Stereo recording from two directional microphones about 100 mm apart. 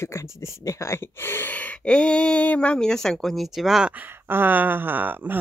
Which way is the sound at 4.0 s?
20° right (ahead or behind).